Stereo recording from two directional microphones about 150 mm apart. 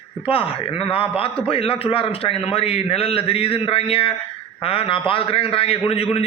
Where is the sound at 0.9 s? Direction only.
40° left (ahead or behind).